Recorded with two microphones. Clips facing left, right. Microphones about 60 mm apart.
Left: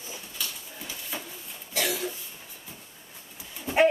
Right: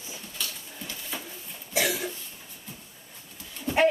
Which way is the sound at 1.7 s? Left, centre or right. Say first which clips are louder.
Right 3 dB; centre.